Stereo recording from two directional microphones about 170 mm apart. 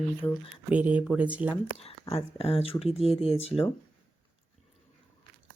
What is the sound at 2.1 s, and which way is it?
Speech, 35° left (ahead or behind).